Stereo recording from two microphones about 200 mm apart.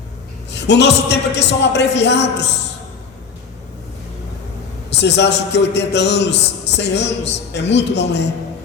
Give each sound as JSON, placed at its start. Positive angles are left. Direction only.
{"t": 0.5, "sound": "a man's voice", "side_deg": 60}
{"t": 4.9, "sound": "a man's voice", "side_deg": 60}